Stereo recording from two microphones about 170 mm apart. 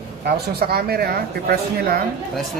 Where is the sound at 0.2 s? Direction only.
65° right (ahead or behind).